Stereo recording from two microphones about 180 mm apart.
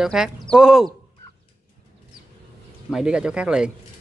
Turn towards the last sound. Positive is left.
turn(degrees=-5)  # may be behind; listen again after turning